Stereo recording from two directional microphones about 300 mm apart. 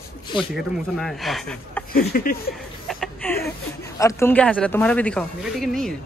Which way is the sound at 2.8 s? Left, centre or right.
Centre.